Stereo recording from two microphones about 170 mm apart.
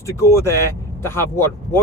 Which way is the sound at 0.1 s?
15° left (ahead or behind).